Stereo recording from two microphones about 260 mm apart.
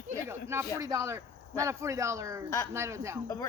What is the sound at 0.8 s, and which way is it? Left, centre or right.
Speech, centre.